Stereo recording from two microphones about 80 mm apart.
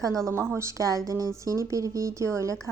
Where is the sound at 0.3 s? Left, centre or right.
Right.